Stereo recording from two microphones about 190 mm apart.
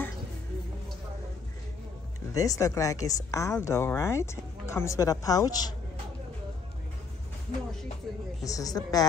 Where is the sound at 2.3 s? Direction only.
20° left (ahead or behind).